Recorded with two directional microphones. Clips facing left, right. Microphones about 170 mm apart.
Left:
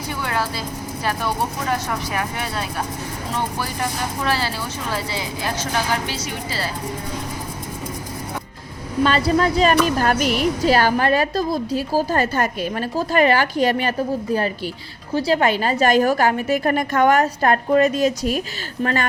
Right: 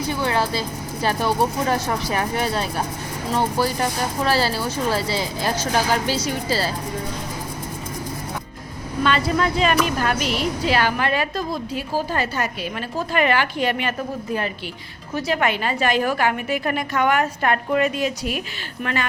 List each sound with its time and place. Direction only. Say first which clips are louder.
0.1 s vehicle: right 2 dB; 25° right (ahead or behind)
1.9 s speech: right 2 dB; 30° right (ahead or behind)
9.0 s a woman's voice: left 2 dB; 35° left (ahead or behind)
15.1 s a woman's voice: left 4 dB; 35° left (ahead or behind)